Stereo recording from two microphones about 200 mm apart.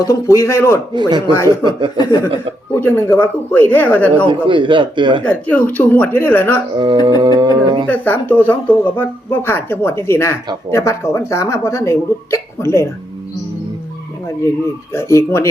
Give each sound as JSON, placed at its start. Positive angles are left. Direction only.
{"t": 0.0, "sound": "speech", "side_deg": 15}
{"t": 0.9, "sound": "speech", "side_deg": -20}
{"t": 2.0, "sound": "speech", "side_deg": 15}
{"t": 4.3, "sound": "speech", "side_deg": -25}
{"t": 5.2, "sound": "speech", "side_deg": 10}
{"t": 6.7, "sound": "speech", "side_deg": -20}
{"t": 7.9, "sound": "speech", "side_deg": 10}
{"t": 14.9, "sound": "speech", "side_deg": 15}